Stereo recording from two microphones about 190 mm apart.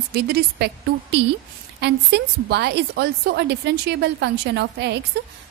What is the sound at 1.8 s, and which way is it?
A woman's voice, 60° right (ahead or behind).